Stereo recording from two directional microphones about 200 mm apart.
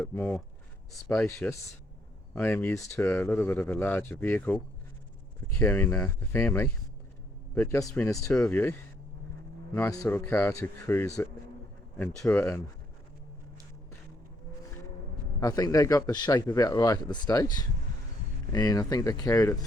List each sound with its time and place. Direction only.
0.0 s speech: 10° left (ahead or behind)
9.7 s speech: 10° left (ahead or behind)
15.4 s speech: 15° left (ahead or behind)